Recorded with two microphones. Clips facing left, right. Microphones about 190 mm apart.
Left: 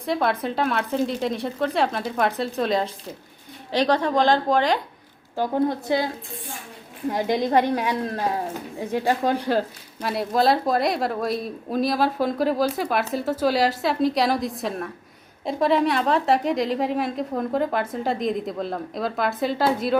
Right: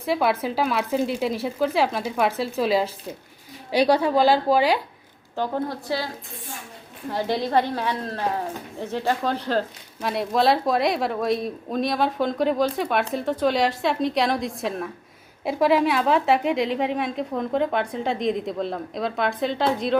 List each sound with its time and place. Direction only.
0.0 s a woman's voice: 5° right (ahead or behind)
5.4 s a woman's voice: 20° left (ahead or behind)
7.1 s a woman's voice: 15° left (ahead or behind)